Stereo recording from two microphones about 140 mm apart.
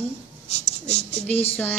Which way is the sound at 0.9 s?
50° left (ahead or behind).